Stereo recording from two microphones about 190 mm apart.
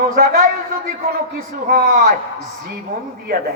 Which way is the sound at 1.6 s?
50° right (ahead or behind).